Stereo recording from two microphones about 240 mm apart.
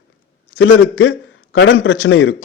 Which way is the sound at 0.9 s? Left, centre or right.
Left.